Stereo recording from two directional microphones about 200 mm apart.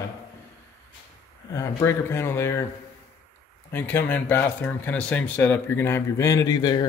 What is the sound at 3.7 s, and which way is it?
A man's voice, 10° left (ahead or behind).